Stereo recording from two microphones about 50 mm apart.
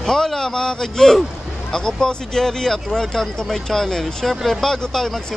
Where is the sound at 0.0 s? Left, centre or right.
Centre.